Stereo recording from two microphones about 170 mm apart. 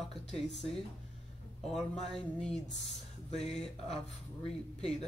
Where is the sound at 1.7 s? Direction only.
5° left (ahead or behind).